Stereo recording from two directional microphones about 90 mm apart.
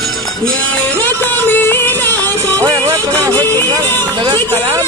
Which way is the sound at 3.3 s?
25° left (ahead or behind).